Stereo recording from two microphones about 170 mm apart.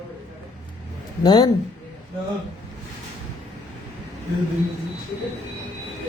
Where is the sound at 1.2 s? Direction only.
25° left (ahead or behind).